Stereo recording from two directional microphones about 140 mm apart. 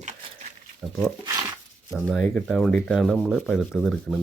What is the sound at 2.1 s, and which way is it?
Speech, centre (ahead or behind).